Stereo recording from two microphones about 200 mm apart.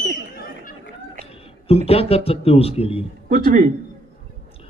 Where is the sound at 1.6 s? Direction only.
30° left (ahead or behind).